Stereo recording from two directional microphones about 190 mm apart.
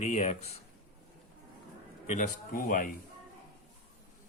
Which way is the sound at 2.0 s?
40° left (ahead or behind).